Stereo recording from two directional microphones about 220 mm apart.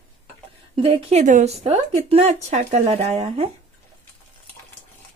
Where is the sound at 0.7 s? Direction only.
25° right (ahead or behind).